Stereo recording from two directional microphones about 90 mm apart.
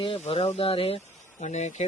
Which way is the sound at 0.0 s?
85° left.